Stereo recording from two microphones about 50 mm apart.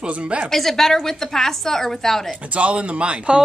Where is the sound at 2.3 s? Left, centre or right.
Right.